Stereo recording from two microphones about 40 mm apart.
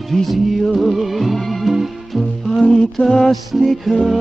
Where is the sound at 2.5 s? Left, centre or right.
Left.